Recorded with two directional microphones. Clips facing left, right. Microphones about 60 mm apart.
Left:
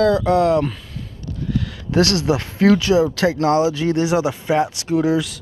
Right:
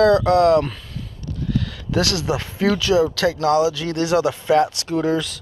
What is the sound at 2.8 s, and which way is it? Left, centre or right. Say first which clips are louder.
Speech: left 1 dB; left.